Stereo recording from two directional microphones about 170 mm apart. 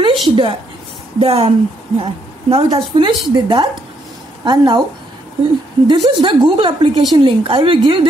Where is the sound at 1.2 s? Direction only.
35° right (ahead or behind).